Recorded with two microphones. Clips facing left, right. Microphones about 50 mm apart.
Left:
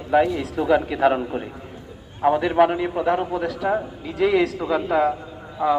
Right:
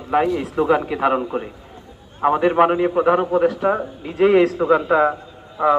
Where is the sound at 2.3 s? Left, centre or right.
Right.